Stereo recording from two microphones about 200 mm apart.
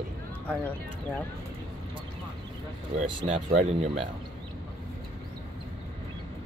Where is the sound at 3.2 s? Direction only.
35° right (ahead or behind).